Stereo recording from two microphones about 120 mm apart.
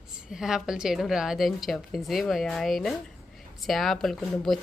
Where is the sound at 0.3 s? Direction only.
5° right (ahead or behind).